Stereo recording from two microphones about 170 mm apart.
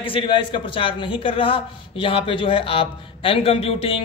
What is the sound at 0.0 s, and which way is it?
Speech, 30° left (ahead or behind).